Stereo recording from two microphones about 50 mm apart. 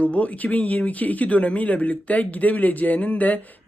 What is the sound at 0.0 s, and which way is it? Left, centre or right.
Speech, left.